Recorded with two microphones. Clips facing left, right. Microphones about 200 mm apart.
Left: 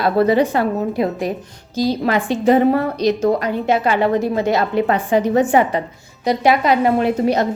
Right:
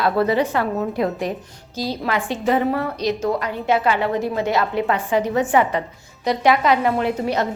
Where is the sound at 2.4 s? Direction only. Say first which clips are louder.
Left 6 dB; 40° left (ahead or behind).